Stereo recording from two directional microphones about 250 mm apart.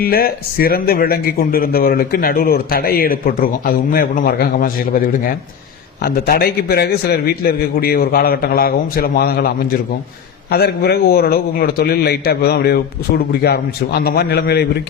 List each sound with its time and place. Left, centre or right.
0.0 s speech: left
10.5 s speech: left